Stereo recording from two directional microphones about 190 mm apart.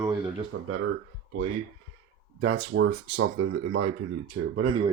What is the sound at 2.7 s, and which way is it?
Speech, 90° right.